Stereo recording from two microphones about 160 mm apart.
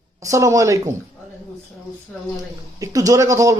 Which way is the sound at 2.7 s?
20° right (ahead or behind).